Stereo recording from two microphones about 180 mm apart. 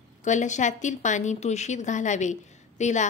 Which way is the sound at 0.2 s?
40° left (ahead or behind).